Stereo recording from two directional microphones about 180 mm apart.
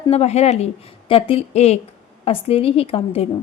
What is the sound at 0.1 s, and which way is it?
A woman's voice, 35° left (ahead or behind).